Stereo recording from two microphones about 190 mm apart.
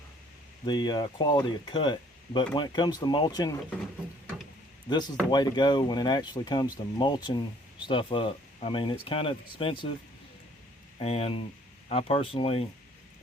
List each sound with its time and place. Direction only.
0.6 s speech: 25° left (ahead or behind)
4.9 s speech: 20° left (ahead or behind)
11.0 s speech: 30° left (ahead or behind)